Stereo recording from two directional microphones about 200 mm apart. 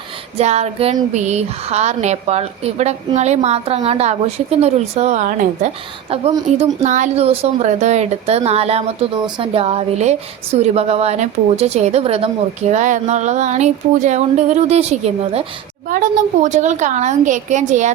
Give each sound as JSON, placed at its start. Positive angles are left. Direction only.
{"t": 0.3, "sound": "a woman's voice", "side_deg": -35}